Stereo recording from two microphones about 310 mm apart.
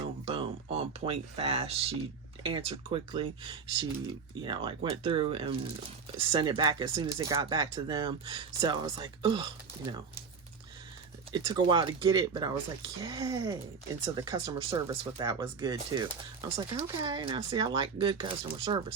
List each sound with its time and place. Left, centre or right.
0.3 s speech: centre
11.3 s speech: centre